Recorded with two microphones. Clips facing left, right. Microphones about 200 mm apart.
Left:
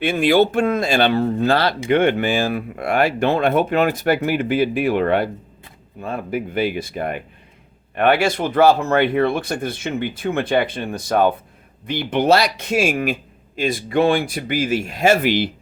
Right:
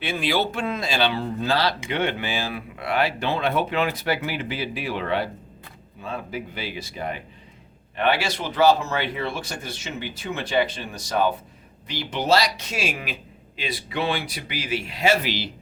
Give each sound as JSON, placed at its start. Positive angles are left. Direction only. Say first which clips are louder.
{"t": 0.0, "sound": "speech", "louder": "left 9 dB", "side_deg": 50}